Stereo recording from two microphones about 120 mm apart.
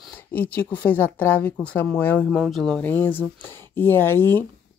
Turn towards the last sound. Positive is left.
turn(degrees=20)  # may be behind; listen again after turning